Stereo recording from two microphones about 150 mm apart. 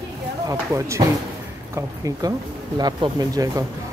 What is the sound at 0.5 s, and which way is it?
Speech, 20° right (ahead or behind).